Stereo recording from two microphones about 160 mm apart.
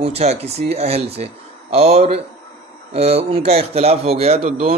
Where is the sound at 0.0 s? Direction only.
40° right (ahead or behind).